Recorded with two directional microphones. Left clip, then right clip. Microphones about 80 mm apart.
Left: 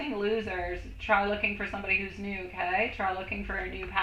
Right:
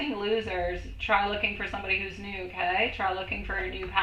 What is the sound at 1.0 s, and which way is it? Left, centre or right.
Speech, left.